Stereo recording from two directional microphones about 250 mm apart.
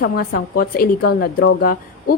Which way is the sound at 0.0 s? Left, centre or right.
Left.